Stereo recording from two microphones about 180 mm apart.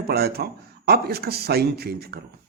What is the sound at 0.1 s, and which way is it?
A man's voice, 60° right (ahead or behind).